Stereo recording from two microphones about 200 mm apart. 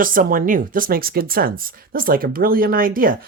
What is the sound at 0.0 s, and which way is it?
Speech, 45° right (ahead or behind).